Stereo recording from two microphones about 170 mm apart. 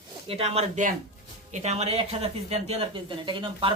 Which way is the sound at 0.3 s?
35° right (ahead or behind).